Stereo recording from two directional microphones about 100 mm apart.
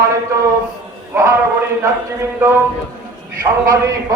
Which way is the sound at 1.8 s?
25° right (ahead or behind).